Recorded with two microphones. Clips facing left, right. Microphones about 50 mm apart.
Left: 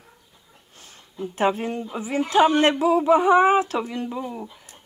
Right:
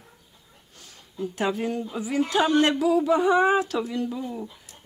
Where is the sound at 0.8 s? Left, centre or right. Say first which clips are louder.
Even; left.